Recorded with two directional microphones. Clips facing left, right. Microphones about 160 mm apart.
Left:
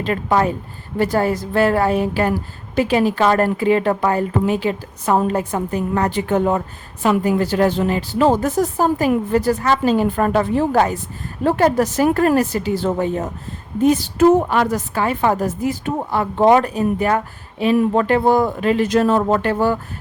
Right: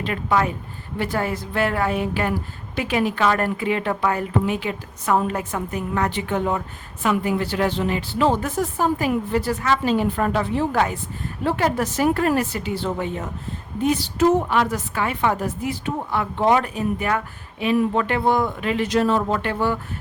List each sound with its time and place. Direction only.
0.0 s a woman's voice: 35° left (ahead or behind)